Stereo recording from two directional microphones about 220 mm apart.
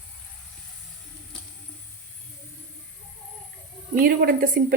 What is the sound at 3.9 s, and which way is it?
Speech, 40° right (ahead or behind).